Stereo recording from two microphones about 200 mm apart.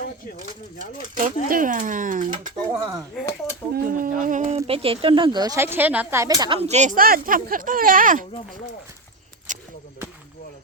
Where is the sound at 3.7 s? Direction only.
45° right (ahead or behind).